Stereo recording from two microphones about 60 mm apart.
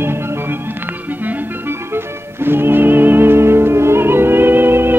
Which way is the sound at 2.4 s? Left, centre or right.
Right.